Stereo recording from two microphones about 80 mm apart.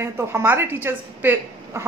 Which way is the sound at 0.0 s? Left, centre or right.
Right.